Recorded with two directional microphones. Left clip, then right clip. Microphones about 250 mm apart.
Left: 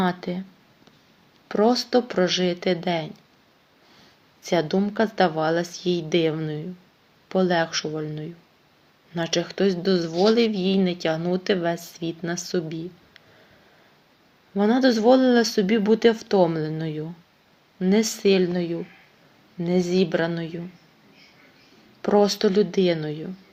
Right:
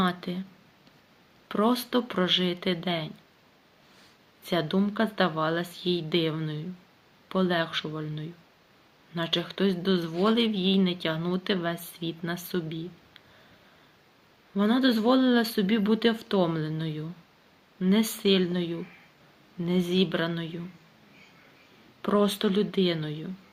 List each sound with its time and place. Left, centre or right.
0.0 s speech: centre
1.5 s speech: centre
4.4 s speech: centre
5.8 s a woman's voice: left
6.1 s speech: centre
14.5 s speech: centre
19.8 s a woman's voice: left
20.1 s speech: centre
22.0 s speech: centre